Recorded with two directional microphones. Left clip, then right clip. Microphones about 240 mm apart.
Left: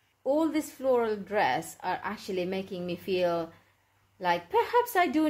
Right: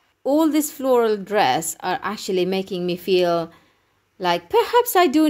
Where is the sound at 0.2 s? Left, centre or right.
Right.